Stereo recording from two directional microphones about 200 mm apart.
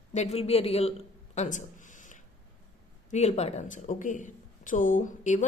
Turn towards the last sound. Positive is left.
turn(degrees=35)  # may be behind; listen again after turning